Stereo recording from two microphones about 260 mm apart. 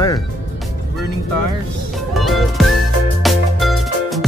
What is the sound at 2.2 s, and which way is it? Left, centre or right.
Music, centre.